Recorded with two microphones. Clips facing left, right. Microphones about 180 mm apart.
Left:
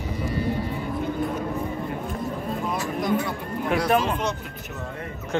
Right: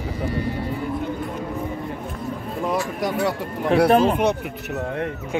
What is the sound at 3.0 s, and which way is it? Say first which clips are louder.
Speech: left 1 dB; 75° right (ahead or behind).